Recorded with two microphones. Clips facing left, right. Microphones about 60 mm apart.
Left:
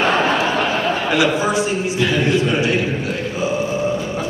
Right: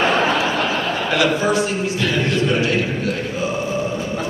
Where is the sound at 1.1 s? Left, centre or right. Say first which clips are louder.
Right 1 dB; centre.